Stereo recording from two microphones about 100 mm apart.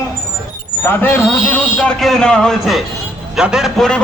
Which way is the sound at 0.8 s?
20° left (ahead or behind).